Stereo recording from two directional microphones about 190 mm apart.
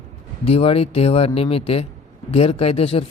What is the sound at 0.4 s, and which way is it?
A man's voice, 30° left (ahead or behind).